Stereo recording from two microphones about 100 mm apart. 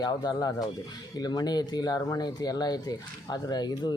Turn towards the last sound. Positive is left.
turn(degrees=45)  # may be behind; listen again after turning